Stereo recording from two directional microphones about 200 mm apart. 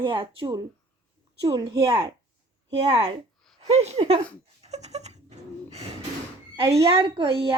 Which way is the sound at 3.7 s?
30° right (ahead or behind).